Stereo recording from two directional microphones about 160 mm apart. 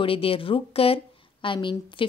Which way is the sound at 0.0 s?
35° left (ahead or behind).